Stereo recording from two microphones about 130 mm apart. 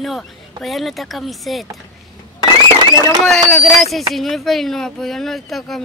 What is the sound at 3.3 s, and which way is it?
A man's voice, 5° left (ahead or behind).